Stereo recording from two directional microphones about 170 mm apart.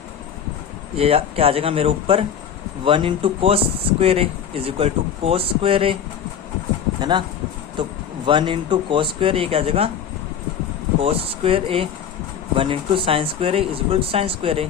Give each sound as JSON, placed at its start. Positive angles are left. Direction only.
{"t": 0.9, "sound": "speech", "side_deg": -35}
{"t": 7.0, "sound": "speech", "side_deg": -25}
{"t": 11.0, "sound": "speech", "side_deg": -35}